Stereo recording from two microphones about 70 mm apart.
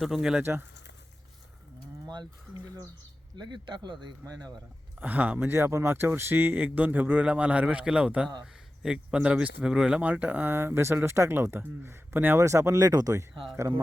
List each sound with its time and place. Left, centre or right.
0.0 s speech: centre
3.3 s speech: right
4.3 s speech: right
4.9 s speech: right
10.0 s speech: right
10.5 s speech: right
12.4 s speech: right